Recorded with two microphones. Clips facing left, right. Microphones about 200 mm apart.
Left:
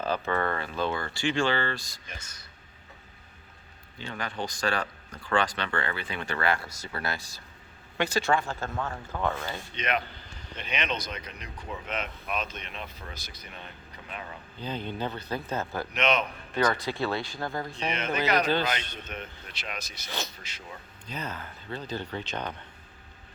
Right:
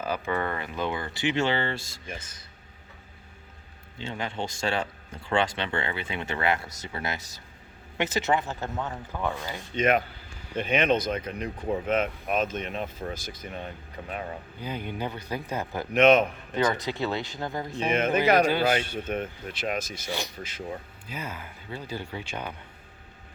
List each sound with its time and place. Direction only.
0.0 s speech: 10° right (ahead or behind); by 2.2 s 25° right (ahead or behind)
3.9 s speech: 25° right (ahead or behind)
9.7 s speech: 45° right (ahead or behind)
14.6 s speech: 10° right (ahead or behind)
15.9 s speech: 50° right (ahead or behind)
16.6 s speech: 20° right (ahead or behind)
17.8 s speech: 50° right (ahead or behind)
18.4 s speech: 10° right (ahead or behind)
18.9 s speech: 50° right (ahead or behind)
20.1 s speech: 15° right (ahead or behind)